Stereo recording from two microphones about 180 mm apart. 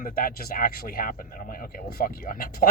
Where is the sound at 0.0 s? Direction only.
55° left (ahead or behind).